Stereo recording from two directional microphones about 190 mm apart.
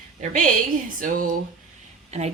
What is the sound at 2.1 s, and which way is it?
Speech, 35° right (ahead or behind).